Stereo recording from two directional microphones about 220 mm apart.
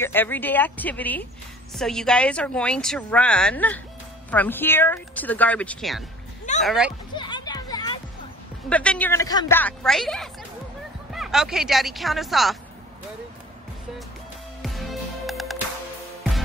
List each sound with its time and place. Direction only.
0.0 s speech: 10° left (ahead or behind)
7.2 s music: 20° left (ahead or behind)
8.6 s speech: 5° left (ahead or behind)
14.6 s music: centre (ahead or behind)